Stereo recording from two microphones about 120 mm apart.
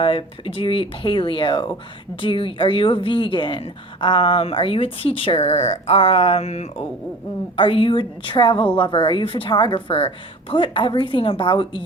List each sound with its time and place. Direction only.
0.0 s speech: 45° left (ahead or behind)
7.5 s speech: 50° left (ahead or behind)